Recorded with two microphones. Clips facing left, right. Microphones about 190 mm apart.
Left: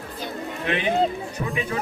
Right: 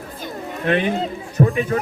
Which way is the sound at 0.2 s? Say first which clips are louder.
Right 2 dB; 50° right (ahead or behind).